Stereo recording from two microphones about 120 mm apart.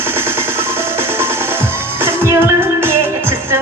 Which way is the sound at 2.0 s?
20° right (ahead or behind).